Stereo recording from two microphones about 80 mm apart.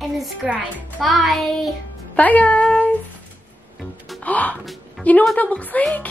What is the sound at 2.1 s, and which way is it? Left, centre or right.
Speech, centre.